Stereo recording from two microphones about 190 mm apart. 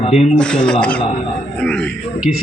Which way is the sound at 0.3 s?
5° left (ahead or behind).